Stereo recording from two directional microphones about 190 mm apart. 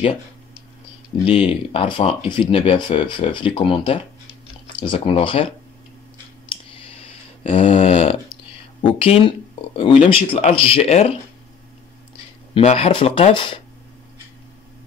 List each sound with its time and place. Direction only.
1.2 s speech: 30° left (ahead or behind)
6.7 s a sound: 30° left (ahead or behind)
8.8 s speech: 30° left (ahead or behind)
12.5 s speech: 30° left (ahead or behind)